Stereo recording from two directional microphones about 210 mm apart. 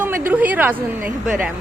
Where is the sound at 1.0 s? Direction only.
40° right (ahead or behind).